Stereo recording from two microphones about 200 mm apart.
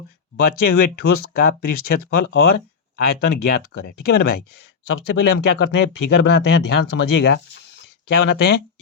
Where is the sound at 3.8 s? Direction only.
50° left (ahead or behind).